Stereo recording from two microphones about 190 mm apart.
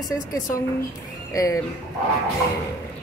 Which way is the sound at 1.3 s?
15° left (ahead or behind).